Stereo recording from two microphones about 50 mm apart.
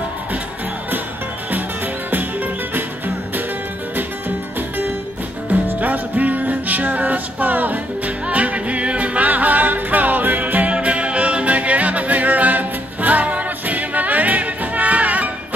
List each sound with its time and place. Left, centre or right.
5.5 s music: right